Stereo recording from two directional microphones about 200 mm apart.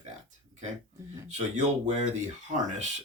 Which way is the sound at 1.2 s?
35° right (ahead or behind).